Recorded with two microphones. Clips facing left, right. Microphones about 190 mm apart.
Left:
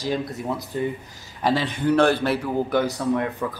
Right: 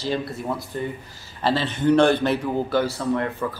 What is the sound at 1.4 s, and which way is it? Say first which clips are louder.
Speech: right 1 dB; 10° left (ahead or behind).